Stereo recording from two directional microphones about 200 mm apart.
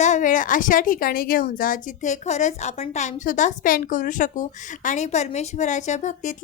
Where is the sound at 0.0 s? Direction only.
40° left (ahead or behind).